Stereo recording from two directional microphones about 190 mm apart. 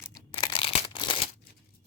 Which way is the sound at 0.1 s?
25° left (ahead or behind).